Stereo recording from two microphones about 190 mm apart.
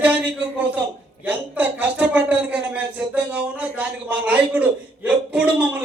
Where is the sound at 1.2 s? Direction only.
10° right (ahead or behind).